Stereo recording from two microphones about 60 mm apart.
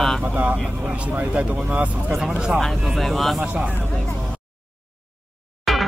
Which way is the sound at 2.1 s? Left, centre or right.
Centre.